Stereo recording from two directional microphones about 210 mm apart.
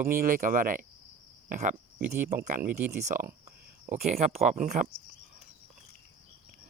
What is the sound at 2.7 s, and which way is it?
Speech, 10° right (ahead or behind).